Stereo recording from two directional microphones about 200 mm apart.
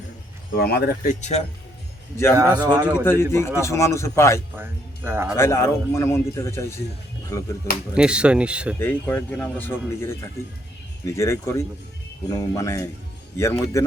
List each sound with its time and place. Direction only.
0.5 s speech: 50° left (ahead or behind); by 1.5 s 35° left (ahead or behind)
2.3 s a man's voice: 15° right (ahead or behind)
3.0 s speech: 10° left (ahead or behind)
4.5 s speech: 10° right (ahead or behind)
5.4 s speech: 15° left (ahead or behind)
7.9 s speech: 5° right (ahead or behind)
8.8 s speech: 10° left (ahead or behind)